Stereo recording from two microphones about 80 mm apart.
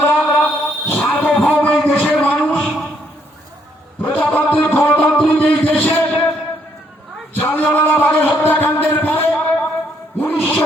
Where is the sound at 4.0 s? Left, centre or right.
Left.